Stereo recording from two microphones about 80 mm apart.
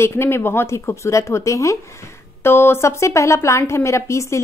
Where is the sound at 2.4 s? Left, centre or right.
Left.